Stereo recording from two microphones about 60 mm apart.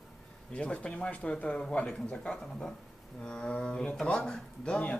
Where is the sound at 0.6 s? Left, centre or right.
Centre.